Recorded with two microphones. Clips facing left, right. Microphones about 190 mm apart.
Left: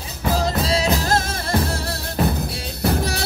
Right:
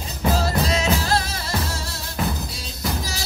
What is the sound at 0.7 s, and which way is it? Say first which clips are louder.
Music: left 2 dB; 35° left (ahead or behind).